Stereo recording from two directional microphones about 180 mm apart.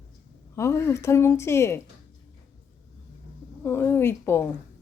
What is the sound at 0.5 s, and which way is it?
Speech, 15° left (ahead or behind).